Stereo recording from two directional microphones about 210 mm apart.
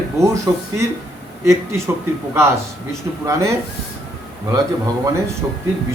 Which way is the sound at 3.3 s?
15° right (ahead or behind).